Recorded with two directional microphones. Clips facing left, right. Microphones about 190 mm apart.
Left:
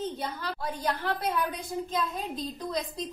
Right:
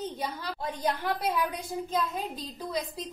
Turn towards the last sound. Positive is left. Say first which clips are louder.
# left 1 dB
turn(degrees=-5)  # may be behind; listen again after turning